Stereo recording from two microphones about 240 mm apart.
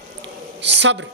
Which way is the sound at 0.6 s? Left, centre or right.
Right.